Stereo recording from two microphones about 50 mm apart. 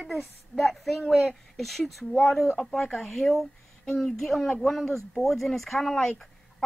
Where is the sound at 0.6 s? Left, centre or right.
Centre.